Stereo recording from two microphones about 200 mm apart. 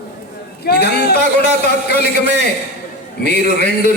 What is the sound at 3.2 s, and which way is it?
Speech, 55° left (ahead or behind).